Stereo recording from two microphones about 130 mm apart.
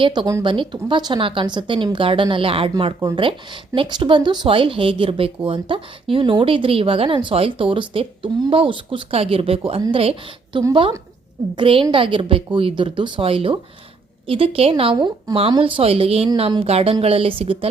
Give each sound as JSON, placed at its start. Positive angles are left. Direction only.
{"t": 0.0, "sound": "a woman's voice", "side_deg": -40}
{"t": 14.9, "sound": "a woman's voice", "side_deg": -35}